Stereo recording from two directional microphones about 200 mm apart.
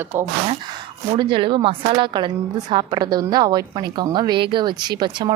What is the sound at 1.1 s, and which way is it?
A woman's voice, 25° right (ahead or behind).